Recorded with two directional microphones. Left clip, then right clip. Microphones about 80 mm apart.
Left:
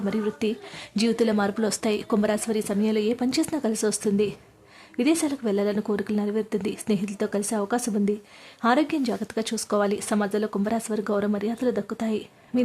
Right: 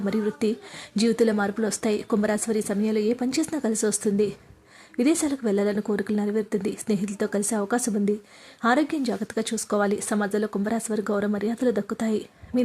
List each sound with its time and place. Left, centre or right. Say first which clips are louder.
0.0 s speech: right 1 dB; right
1.5 s speech: left 1 dB; centre
1.7 s speech: even; right
8.6 s speech: even; centre